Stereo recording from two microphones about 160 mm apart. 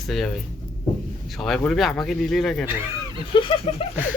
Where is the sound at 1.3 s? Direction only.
Centre (ahead or behind).